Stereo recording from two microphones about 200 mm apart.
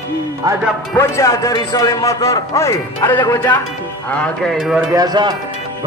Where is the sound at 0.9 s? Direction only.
15° left (ahead or behind).